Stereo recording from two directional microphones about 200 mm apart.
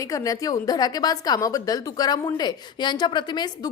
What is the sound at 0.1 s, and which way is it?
A woman's voice, 15° left (ahead or behind).